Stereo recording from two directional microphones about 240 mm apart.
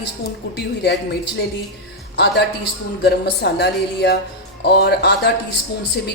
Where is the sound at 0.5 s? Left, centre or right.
Left.